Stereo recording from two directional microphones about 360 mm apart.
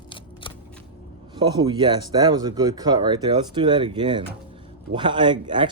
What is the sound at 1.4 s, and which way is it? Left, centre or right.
Speech, centre.